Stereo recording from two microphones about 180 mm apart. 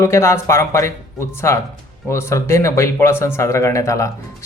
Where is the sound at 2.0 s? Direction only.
15° left (ahead or behind).